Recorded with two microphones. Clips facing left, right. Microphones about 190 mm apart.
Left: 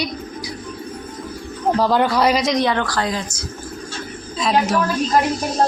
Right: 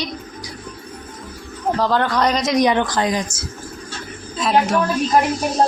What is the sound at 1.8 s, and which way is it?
Speech, 10° left (ahead or behind).